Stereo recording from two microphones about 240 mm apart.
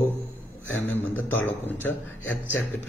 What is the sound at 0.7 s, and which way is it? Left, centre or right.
Speech, centre.